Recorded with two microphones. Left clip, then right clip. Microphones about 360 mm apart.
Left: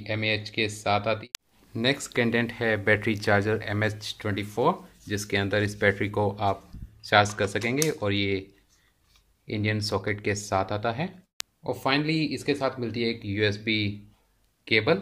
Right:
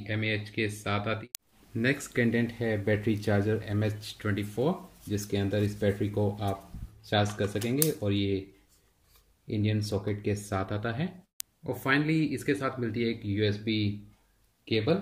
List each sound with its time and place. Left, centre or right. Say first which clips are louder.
0.0 s speech: left 4 dB; centre
6.0 s speech: left 4 dB; left
7.0 s speech: left 7 dB; centre
9.5 s speech: left 4 dB; centre